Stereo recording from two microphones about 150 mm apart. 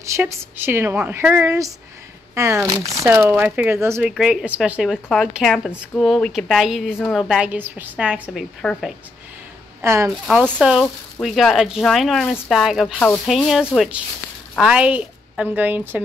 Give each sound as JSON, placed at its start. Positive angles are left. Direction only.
{"t": 0.0, "sound": "a woman's voice", "side_deg": -20}
{"t": 4.1, "sound": "a woman's voice", "side_deg": -5}
{"t": 9.8, "sound": "a woman's voice", "side_deg": -20}
{"t": 10.6, "sound": "a woman's voice", "side_deg": -5}